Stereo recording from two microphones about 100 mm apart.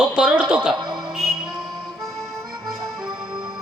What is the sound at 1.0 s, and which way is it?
Music, 5° right (ahead or behind).